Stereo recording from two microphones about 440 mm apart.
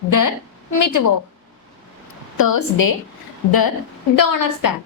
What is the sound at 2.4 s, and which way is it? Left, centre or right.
Speech, left.